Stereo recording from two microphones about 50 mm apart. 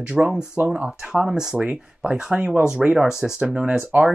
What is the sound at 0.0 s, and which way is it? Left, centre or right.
Speech, centre.